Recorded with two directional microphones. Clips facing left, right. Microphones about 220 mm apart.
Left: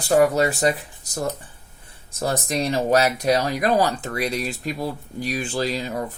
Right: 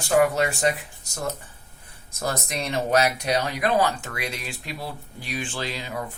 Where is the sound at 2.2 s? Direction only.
30° left (ahead or behind).